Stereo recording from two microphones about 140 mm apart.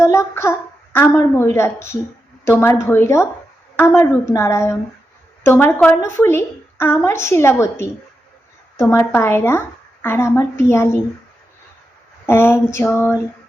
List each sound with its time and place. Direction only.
0.0 s a woman's voice: 20° left (ahead or behind)
12.2 s a woman's voice: 15° left (ahead or behind)